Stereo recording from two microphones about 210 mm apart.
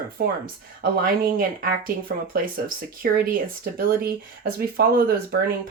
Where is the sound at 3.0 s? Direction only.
45° right (ahead or behind).